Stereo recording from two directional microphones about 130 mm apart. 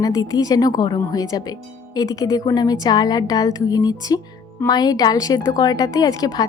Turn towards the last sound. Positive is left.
turn(degrees=30)  # may be behind; listen again after turning